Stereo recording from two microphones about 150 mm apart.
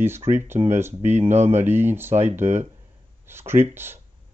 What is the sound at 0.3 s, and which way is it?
Speech, 15° right (ahead or behind).